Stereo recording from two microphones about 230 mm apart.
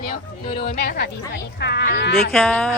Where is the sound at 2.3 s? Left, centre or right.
Centre.